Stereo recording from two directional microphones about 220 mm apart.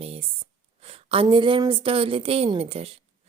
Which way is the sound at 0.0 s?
25° right (ahead or behind).